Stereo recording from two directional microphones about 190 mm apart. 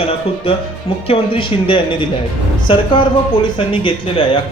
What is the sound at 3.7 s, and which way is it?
Speech, 25° left (ahead or behind).